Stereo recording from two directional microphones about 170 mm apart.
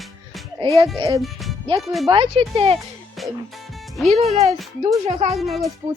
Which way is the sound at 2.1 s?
35° right (ahead or behind).